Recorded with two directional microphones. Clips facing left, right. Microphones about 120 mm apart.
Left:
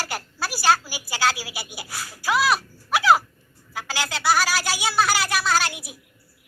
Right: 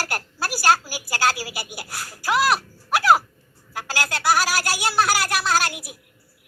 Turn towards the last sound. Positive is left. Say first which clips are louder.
# right 1 dB
turn(degrees=-10)  # may be behind; listen again after turning